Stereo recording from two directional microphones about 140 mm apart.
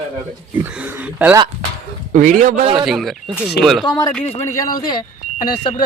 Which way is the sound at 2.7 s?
Centre (ahead or behind).